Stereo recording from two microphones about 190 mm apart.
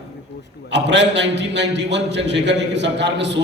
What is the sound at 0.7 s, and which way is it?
A man's voice, 65° right (ahead or behind).